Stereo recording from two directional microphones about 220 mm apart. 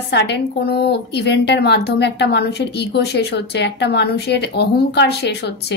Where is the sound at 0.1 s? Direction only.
50° left (ahead or behind).